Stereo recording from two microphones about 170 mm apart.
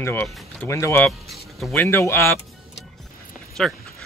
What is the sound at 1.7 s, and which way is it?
Speech, 15° left (ahead or behind).